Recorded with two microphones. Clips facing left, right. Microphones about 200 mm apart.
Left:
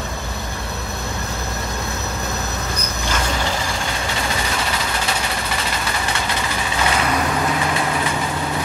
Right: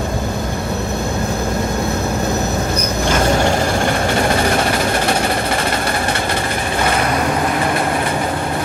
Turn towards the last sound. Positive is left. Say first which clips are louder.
# right 4 dB
turn(degrees=-55)  # may be behind; listen again after turning